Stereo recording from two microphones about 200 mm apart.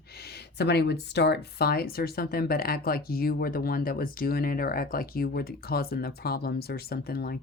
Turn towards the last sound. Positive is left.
turn(degrees=50)  # may be behind; listen again after turning